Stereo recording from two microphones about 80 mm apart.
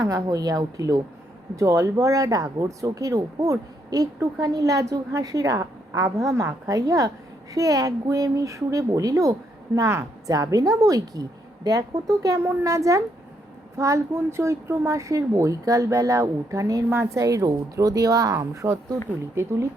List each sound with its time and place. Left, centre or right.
0.0 s speech: right
18.3 s speech: right